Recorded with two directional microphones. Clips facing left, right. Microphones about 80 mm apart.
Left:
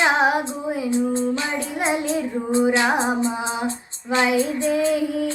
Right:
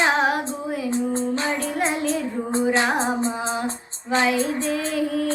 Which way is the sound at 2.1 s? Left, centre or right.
Right.